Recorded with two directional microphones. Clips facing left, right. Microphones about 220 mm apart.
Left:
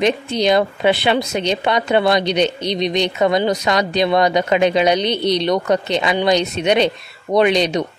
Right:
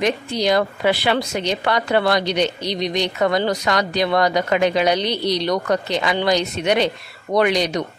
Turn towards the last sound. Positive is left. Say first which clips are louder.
# left 3 dB
turn(degrees=20)  # may be behind; listen again after turning